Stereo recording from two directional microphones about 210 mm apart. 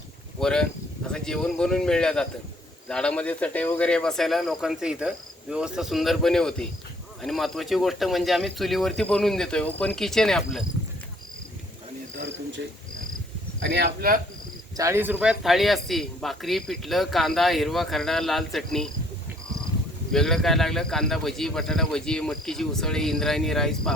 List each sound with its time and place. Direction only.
0.3 s a man's voice: 5° left (ahead or behind)
13.6 s speech: 55° right (ahead or behind)
14.8 s a man's voice: 15° right (ahead or behind)
20.1 s a man's voice: centre (ahead or behind)